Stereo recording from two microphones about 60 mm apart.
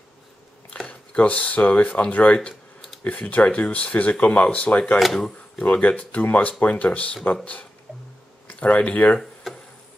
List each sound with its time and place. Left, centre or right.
0.8 s speech: left
4.9 s speech: centre
5.6 s speech: left
8.5 s speech: left
9.2 s a sound: centre